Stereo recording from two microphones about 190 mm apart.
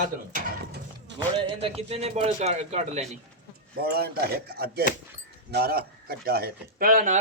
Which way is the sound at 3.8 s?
55° right (ahead or behind).